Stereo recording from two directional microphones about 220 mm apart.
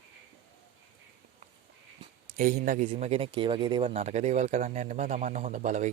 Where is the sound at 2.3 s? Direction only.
35° right (ahead or behind).